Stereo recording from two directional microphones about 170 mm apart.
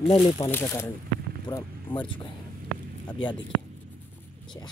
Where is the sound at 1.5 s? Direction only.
25° left (ahead or behind).